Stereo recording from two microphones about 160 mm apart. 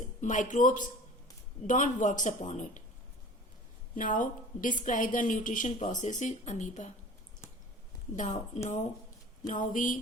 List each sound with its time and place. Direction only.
0.2 s a woman's voice: 50° left (ahead or behind)
3.9 s a woman's voice: 55° left (ahead or behind)
8.1 s a woman's voice: 50° left (ahead or behind)